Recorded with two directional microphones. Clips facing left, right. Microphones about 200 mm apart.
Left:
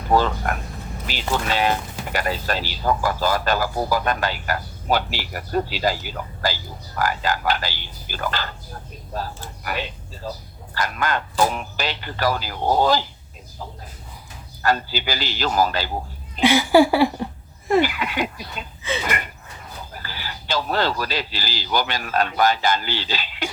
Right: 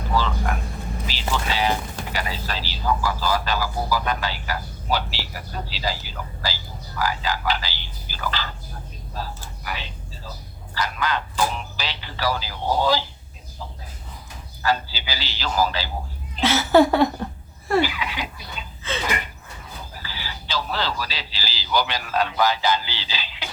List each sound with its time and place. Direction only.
0.1 s speech: 50° left (ahead or behind)
14.6 s speech: 50° left (ahead or behind)
16.4 s a sound: 15° left (ahead or behind)
17.8 s speech: 50° left (ahead or behind)
18.8 s a sound: 15° left (ahead or behind)
19.9 s speech: 50° left (ahead or behind)